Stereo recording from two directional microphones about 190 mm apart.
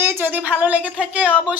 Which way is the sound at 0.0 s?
10° right (ahead or behind).